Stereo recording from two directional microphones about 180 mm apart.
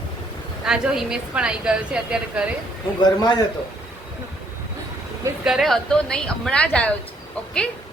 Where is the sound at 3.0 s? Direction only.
25° left (ahead or behind).